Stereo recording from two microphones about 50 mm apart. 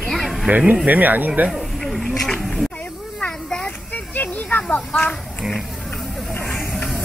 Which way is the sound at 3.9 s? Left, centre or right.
Left.